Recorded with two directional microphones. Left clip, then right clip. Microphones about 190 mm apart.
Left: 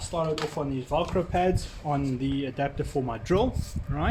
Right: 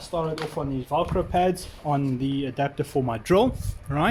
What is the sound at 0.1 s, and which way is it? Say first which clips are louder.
Speech: right 1 dB; 30° right (ahead or behind).